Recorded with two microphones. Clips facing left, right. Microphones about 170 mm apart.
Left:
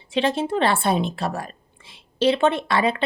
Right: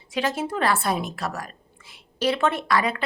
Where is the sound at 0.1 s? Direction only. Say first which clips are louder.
Left 4 dB; 25° left (ahead or behind).